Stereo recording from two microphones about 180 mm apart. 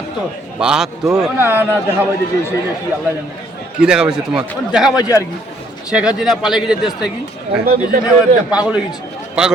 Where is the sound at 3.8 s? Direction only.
5° right (ahead or behind).